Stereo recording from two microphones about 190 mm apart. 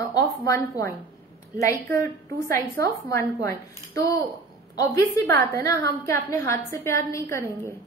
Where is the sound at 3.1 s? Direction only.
15° left (ahead or behind).